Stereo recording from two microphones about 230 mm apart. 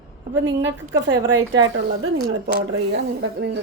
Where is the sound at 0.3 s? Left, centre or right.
Right.